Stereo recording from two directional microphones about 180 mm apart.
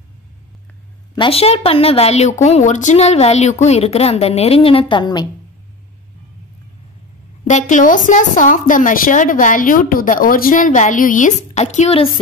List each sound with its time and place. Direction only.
1.1 s a woman's voice: 30° left (ahead or behind)
7.4 s a woman's voice: 40° left (ahead or behind)